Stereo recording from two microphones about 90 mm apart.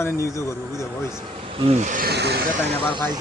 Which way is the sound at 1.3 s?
90° right.